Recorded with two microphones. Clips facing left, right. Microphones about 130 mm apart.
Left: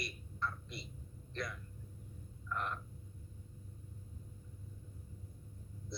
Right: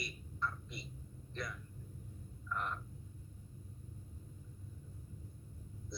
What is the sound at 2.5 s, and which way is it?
Frog, 5° right (ahead or behind).